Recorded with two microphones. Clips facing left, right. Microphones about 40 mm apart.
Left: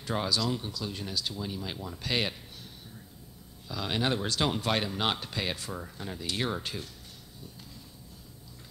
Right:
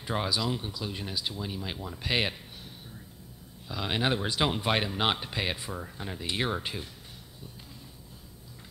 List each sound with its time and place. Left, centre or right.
0.0 s speech: centre
3.6 s speech: centre